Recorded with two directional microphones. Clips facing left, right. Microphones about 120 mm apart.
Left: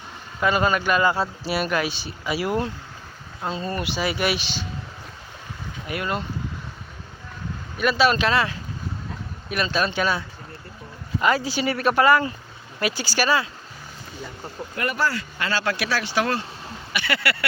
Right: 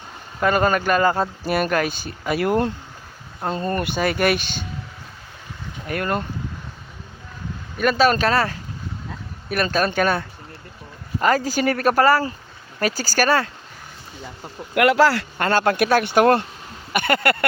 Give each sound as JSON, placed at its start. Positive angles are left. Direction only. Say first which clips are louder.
{"t": 0.3, "sound": "speech", "louder": "right 3 dB", "side_deg": -45}
{"t": 5.9, "sound": "speech", "louder": "right 4 dB", "side_deg": -50}
{"t": 7.8, "sound": "speech", "louder": "right 2 dB", "side_deg": -45}
{"t": 14.8, "sound": "speech", "louder": "right 10 dB", "side_deg": -85}
{"t": 15.4, "sound": "speech", "louder": "right 7 dB", "side_deg": -50}
{"t": 16.9, "sound": "a sound", "louder": "right 6 dB", "side_deg": -50}